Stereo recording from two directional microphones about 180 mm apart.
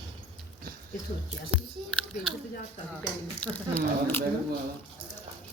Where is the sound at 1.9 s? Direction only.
5° left (ahead or behind).